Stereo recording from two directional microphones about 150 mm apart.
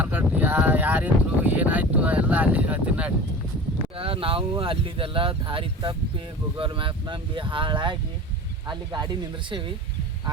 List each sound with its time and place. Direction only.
0.0 s a sound: 10° right (ahead or behind)
0.3 s speech: 10° right (ahead or behind)
3.9 s speech: 40° right (ahead or behind)